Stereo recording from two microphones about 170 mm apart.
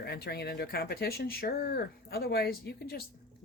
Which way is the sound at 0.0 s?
70° left (ahead or behind).